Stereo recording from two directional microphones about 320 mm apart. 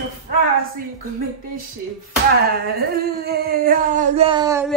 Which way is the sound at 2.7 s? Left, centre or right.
Right.